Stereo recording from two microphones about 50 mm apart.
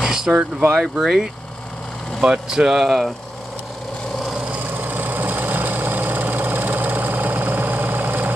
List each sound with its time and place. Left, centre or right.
0.0 s vehicle: centre
0.7 s speech: centre
4.7 s a sound: right